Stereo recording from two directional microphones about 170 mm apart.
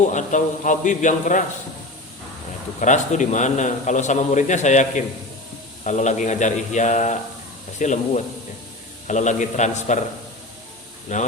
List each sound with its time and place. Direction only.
0.1 s a man's voice: 45° left (ahead or behind)
2.8 s a man's voice: 45° left (ahead or behind)
11.1 s a man's voice: 45° left (ahead or behind)